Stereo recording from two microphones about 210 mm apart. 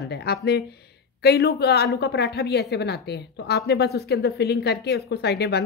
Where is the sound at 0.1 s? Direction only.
50° left (ahead or behind).